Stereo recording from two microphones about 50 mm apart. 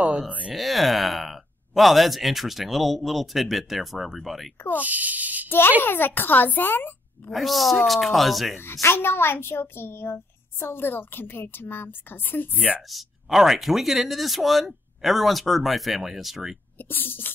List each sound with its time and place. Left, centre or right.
0.5 s speech: centre
4.7 s speech: right
5.8 s speech: left
7.2 s speech: centre
8.8 s a woman's voice: left
12.9 s speech: centre
16.7 s a woman's voice: left